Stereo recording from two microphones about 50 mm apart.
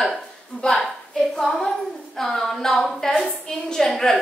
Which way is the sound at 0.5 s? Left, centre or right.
Centre.